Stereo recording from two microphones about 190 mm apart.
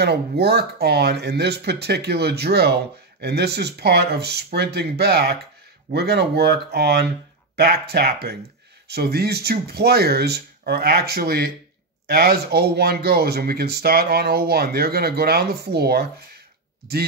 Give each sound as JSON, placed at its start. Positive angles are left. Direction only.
{"t": 0.0, "sound": "speech", "side_deg": -60}